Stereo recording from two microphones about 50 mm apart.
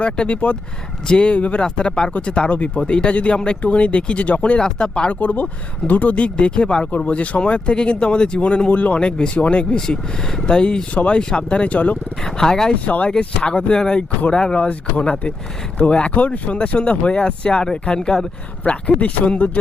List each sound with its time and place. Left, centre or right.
0.0 s speech: left
5.2 s speech: left; by 10.8 s centre
10.9 s speech: left
12.2 s speech: centre
12.7 s speech: left
13.1 s speech: centre
18.6 s speech: left